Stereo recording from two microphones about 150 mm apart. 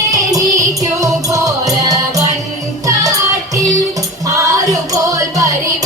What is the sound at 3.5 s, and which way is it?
Music, 20° right (ahead or behind).